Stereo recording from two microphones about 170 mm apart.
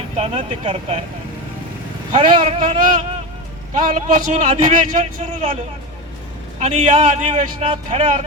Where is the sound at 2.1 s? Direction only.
35° right (ahead or behind).